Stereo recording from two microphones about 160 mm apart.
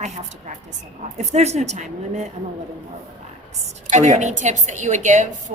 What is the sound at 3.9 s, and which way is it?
A woman's voice, 45° right (ahead or behind).